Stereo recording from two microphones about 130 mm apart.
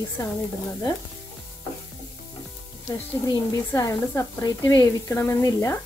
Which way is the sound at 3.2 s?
25° left (ahead or behind).